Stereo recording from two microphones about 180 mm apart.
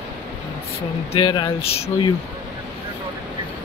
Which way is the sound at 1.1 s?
25° left (ahead or behind).